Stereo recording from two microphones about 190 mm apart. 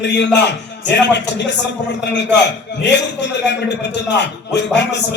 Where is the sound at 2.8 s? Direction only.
65° left (ahead or behind).